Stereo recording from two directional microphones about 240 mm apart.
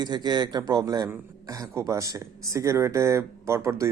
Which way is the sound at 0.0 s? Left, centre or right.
Centre.